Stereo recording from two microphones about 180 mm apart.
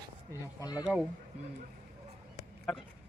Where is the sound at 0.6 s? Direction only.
20° left (ahead or behind).